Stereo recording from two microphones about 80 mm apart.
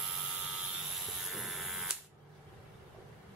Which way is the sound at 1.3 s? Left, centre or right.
Centre.